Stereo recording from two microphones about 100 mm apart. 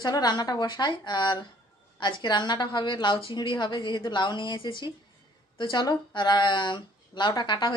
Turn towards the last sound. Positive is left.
turn(degrees=50)  # may be behind; listen again after turning